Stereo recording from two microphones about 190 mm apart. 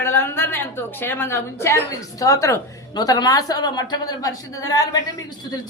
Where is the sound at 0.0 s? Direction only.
10° left (ahead or behind).